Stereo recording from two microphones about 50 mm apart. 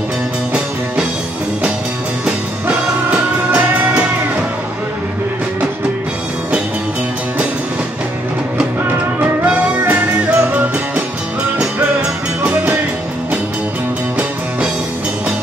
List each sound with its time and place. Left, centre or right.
3.1 s music: right
9.5 s music: right